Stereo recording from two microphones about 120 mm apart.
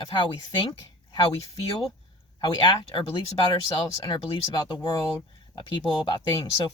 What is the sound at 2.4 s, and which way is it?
Speech, 40° left (ahead or behind).